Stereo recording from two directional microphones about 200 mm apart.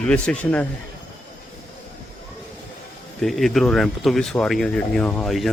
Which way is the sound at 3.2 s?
Centre (ahead or behind).